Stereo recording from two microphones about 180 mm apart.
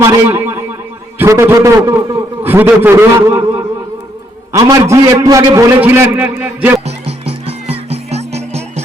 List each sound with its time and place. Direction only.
0.0 s a man's voice: 15° right (ahead or behind)
6.8 s music: 35° right (ahead or behind)